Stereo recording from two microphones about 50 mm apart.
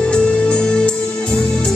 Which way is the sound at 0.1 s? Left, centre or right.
Centre.